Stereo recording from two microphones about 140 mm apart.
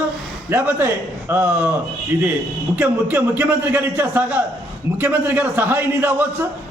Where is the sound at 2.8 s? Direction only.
15° right (ahead or behind).